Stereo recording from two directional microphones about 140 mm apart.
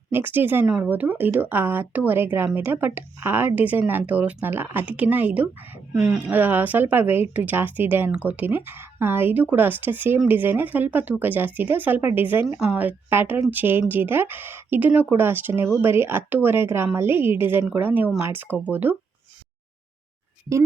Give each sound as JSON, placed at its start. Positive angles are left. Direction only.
{"t": 0.1, "sound": "speech", "side_deg": -15}